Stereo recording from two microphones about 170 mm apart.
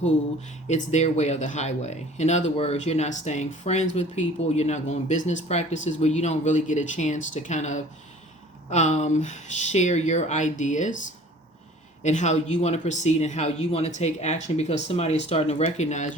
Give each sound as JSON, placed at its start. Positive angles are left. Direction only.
{"t": 0.7, "sound": "speech", "side_deg": 45}
{"t": 12.0, "sound": "speech", "side_deg": 45}